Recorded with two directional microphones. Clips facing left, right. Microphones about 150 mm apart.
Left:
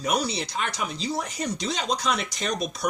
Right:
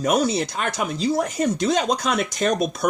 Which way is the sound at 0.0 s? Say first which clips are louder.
Right 6 dB; 50° right (ahead or behind).